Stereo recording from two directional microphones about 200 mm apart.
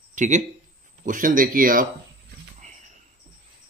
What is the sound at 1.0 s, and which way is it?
Speech, 40° right (ahead or behind).